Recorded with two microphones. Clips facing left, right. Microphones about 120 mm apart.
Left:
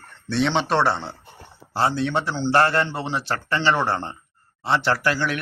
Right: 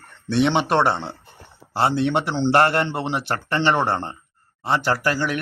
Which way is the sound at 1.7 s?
65° right (ahead or behind).